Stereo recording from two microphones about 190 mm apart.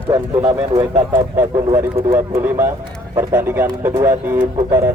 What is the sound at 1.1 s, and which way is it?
Speech, 10° right (ahead or behind).